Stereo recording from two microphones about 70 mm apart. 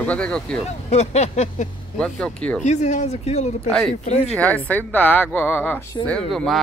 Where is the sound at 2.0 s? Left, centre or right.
Centre.